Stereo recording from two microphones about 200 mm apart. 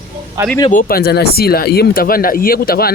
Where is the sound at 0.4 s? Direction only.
15° right (ahead or behind).